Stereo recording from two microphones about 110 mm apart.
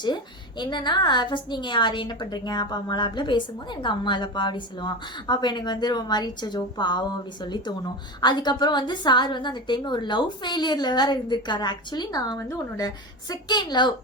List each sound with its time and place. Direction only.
0.6 s a woman's voice: 45° left (ahead or behind)